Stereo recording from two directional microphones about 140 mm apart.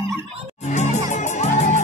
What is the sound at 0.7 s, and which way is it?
Music, 55° left (ahead or behind).